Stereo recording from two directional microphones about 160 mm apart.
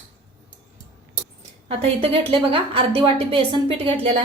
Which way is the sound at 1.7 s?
35° right (ahead or behind).